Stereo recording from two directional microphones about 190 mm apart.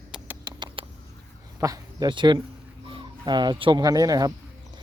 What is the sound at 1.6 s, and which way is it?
Speech, 20° right (ahead or behind).